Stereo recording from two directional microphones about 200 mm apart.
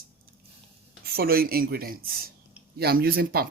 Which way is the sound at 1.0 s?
50° right (ahead or behind).